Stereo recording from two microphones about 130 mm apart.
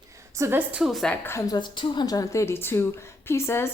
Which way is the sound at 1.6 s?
35° left (ahead or behind).